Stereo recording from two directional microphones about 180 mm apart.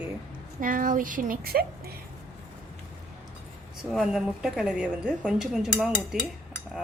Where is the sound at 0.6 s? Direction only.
50° right (ahead or behind).